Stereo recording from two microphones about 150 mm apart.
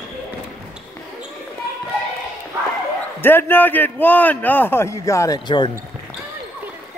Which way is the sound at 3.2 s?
15° left (ahead or behind).